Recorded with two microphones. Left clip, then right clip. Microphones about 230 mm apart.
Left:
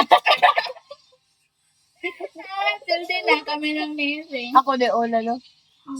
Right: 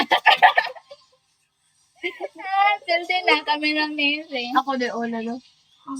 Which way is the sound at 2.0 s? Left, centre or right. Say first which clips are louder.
Right 2 dB; centre.